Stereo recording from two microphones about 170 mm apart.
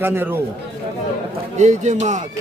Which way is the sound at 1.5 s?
45° right (ahead or behind).